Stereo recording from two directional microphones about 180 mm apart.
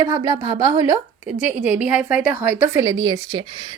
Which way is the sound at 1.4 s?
10° right (ahead or behind).